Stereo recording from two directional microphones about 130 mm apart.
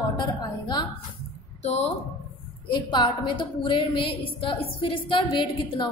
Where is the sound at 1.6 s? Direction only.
55° left (ahead or behind).